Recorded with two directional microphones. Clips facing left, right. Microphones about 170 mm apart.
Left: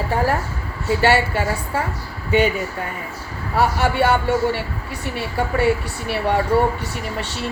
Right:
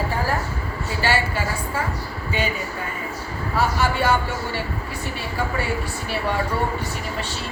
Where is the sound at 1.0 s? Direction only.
65° left (ahead or behind).